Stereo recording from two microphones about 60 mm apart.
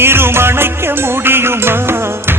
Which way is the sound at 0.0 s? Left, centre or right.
Right.